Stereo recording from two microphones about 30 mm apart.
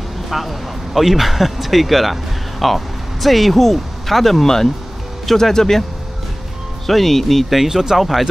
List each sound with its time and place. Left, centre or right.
0.3 s speech: centre
6.9 s speech: centre
7.5 s speech: centre